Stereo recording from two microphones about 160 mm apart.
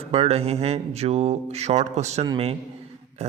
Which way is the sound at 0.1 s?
40° right (ahead or behind).